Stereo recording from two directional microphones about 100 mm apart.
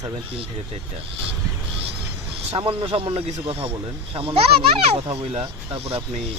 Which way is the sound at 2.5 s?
70° right (ahead or behind).